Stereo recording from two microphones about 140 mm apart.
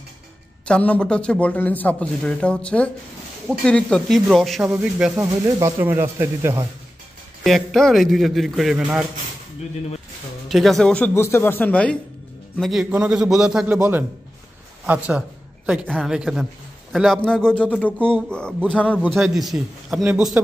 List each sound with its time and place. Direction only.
0.7 s a man's voice: 10° left (ahead or behind); by 5.1 s 10° right (ahead or behind)
5.1 s speech: 20° right (ahead or behind)
7.4 s a man's voice: centre (ahead or behind)
10.5 s a man's voice: centre (ahead or behind)
11.1 s a man's voice: 20° left (ahead or behind); by 13.7 s 5° right (ahead or behind)
14.9 s a man's voice: 10° right (ahead or behind)